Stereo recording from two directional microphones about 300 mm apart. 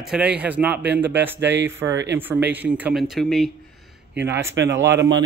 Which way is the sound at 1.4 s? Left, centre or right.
Right.